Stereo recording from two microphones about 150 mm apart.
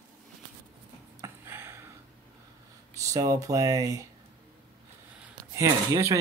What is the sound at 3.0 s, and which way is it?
Speech, 20° right (ahead or behind).